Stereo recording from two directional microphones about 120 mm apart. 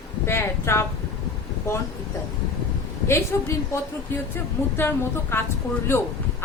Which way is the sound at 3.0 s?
20° left (ahead or behind).